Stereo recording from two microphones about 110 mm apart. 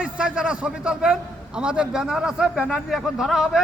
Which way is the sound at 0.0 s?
10° right (ahead or behind).